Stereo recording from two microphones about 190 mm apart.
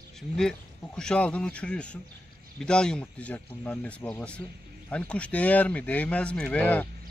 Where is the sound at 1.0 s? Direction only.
5° left (ahead or behind).